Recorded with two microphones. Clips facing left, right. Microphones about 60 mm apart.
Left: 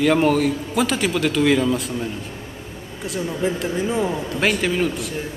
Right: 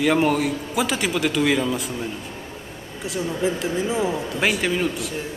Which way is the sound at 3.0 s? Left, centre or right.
Centre.